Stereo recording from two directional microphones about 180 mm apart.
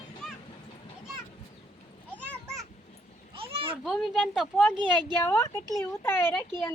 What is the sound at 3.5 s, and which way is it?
Children playing, 30° right (ahead or behind).